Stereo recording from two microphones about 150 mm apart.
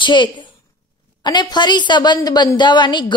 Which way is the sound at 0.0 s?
30° left (ahead or behind).